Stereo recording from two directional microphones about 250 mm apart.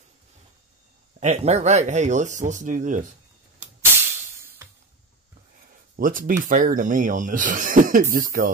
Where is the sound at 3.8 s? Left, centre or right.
Centre.